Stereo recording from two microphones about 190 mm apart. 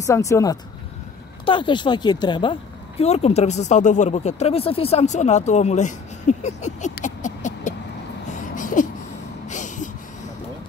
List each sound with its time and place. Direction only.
0.0 s speech: 15° left (ahead or behind)
3.0 s speech: 35° left (ahead or behind)
8.3 s a sound: 45° left (ahead or behind)